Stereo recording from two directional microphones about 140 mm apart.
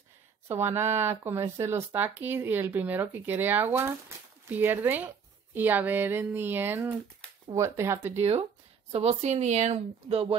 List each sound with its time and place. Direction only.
0.5 s speech: 15° right (ahead or behind)
8.2 s speech: 50° right (ahead or behind)